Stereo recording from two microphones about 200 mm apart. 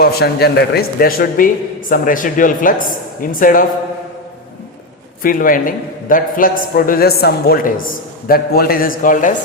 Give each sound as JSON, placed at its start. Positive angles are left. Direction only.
{"t": 0.0, "sound": "a man's voice", "side_deg": 50}
{"t": 5.2, "sound": "a man's voice", "side_deg": 45}